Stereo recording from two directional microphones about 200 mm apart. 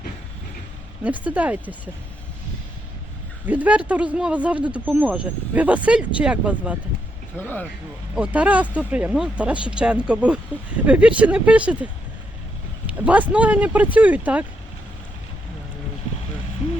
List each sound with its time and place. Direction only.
1.0 s speech: 5° right (ahead or behind)
3.4 s speech: 10° right (ahead or behind)
7.3 s speech: 10° left (ahead or behind)
8.1 s speech: 5° right (ahead or behind)
12.9 s speech: 5° right (ahead or behind)